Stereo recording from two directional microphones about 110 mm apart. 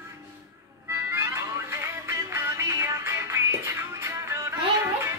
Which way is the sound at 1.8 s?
25° right (ahead or behind).